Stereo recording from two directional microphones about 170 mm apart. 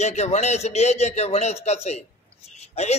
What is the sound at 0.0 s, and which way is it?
A man's voice, 40° left (ahead or behind).